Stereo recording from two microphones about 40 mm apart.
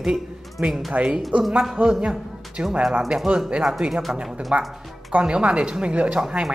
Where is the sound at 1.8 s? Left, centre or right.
Centre.